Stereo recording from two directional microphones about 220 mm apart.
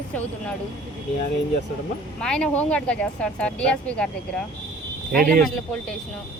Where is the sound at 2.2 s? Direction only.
5° left (ahead or behind).